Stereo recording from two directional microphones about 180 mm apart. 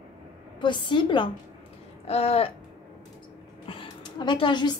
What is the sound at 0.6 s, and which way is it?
A woman's voice, 25° left (ahead or behind).